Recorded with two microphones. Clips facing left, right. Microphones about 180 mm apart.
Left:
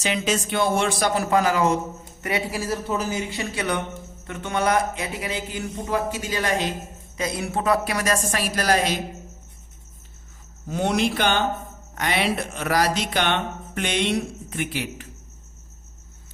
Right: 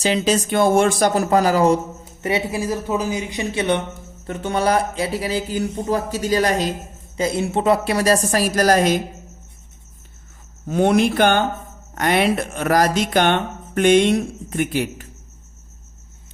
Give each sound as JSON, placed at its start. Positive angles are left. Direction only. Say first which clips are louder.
{"t": 0.0, "sound": "a man's voice", "louder": "right 6 dB", "side_deg": -35}
{"t": 2.2, "sound": "a man's voice", "louder": "right 5 dB", "side_deg": -20}
{"t": 7.2, "sound": "a man's voice", "louder": "right 6 dB", "side_deg": -25}
{"t": 10.7, "sound": "speech", "louder": "right 6 dB", "side_deg": -55}